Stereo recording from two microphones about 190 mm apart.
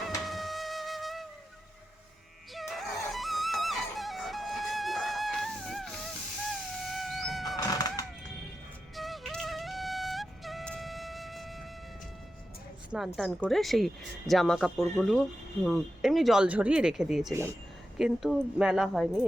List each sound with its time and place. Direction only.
0.3 s flute: centre (ahead or behind)
2.6 s music: centre (ahead or behind)
7.4 s a sound: 20° left (ahead or behind)
9.0 s music: centre (ahead or behind)
13.1 s speech: centre (ahead or behind)